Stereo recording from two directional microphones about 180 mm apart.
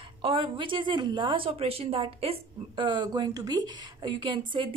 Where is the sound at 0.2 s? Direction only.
30° right (ahead or behind).